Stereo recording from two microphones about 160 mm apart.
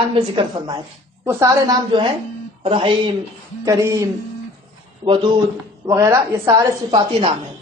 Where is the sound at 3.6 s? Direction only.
20° right (ahead or behind).